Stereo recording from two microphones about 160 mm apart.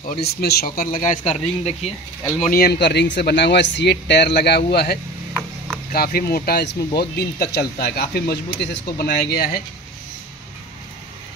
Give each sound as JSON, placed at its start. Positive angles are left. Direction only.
{"t": 0.2, "sound": "speech", "side_deg": 85}
{"t": 1.2, "sound": "speech", "side_deg": 40}
{"t": 2.4, "sound": "speech", "side_deg": 70}
{"t": 5.9, "sound": "speech", "side_deg": 70}